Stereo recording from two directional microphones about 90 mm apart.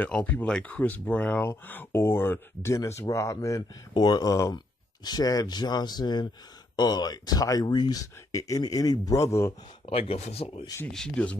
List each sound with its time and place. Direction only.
0.0 s speech: 15° left (ahead or behind)
2.7 s speech: 35° left (ahead or behind)
3.9 s speech: 50° left (ahead or behind)
8.0 s speech: 35° left (ahead or behind)
9.1 s speech: 35° left (ahead or behind)
9.8 s speech: 90° left
10.9 s speech: 10° left (ahead or behind)